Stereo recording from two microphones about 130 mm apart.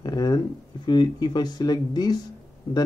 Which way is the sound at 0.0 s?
30° left (ahead or behind).